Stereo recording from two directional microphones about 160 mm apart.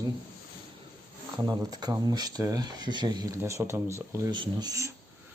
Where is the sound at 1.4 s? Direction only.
25° right (ahead or behind).